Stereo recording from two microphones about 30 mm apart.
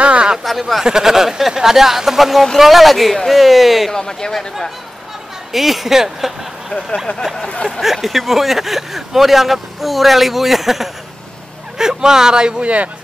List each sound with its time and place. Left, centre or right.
0.0 s a sound: right
0.4 s speech: centre
0.8 s speech: centre
3.9 s a man's voice: left
5.5 s speech: centre
7.8 s speech: centre
11.8 s a man's voice: right
12.6 s speech: right